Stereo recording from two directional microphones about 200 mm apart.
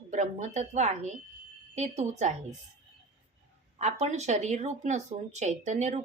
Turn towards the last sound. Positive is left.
turn(degrees=-35)  # may be behind; listen again after turning